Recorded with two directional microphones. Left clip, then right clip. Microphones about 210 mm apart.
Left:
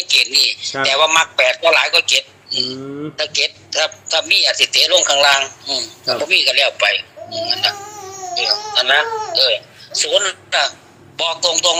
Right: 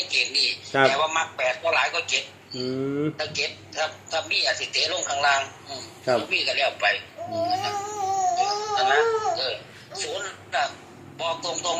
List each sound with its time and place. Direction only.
0.1 s a man's voice: 45° left (ahead or behind)